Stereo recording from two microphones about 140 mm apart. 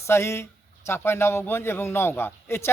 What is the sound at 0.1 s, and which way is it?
A man's voice, 20° left (ahead or behind).